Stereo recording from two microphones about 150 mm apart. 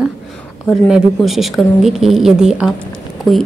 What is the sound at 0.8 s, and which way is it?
A woman's voice, centre (ahead or behind).